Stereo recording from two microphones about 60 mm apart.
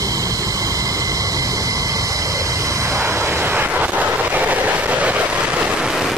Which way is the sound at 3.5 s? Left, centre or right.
Right.